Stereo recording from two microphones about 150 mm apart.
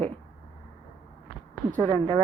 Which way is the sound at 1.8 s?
30° right (ahead or behind).